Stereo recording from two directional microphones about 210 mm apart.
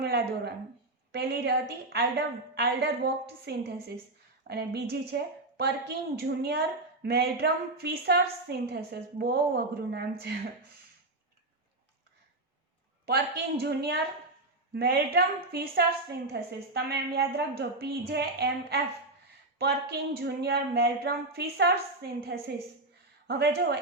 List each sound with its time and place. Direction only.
0.0 s a woman's voice: 50° right (ahead or behind)
13.1 s a woman's voice: 50° right (ahead or behind)